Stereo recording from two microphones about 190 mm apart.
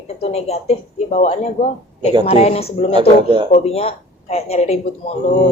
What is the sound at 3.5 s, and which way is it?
A woman's voice, 35° left (ahead or behind).